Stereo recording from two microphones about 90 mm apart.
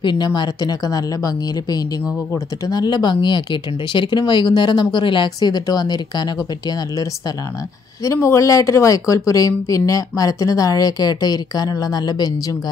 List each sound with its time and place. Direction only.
0.0 s a woman's voice: 55° left (ahead or behind)
8.0 s speech: 35° left (ahead or behind)